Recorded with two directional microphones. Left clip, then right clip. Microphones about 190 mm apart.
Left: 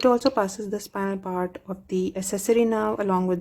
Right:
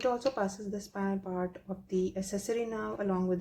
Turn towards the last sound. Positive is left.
turn(degrees=50)  # may be behind; listen again after turning